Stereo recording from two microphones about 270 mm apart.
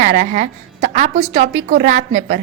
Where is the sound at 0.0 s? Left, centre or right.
Right.